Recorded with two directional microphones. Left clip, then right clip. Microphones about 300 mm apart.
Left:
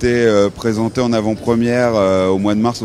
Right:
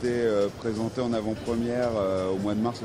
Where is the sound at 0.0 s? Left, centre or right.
Left.